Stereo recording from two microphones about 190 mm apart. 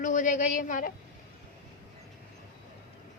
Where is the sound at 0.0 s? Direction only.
40° left (ahead or behind).